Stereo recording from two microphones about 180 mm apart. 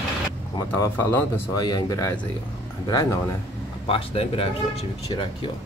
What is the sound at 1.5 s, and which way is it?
Speech, 20° left (ahead or behind).